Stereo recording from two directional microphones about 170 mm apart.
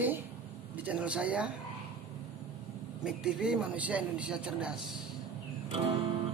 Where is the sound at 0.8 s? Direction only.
5° right (ahead or behind).